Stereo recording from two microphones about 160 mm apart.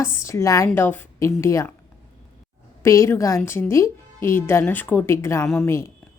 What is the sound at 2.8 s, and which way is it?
A woman's voice, 20° left (ahead or behind).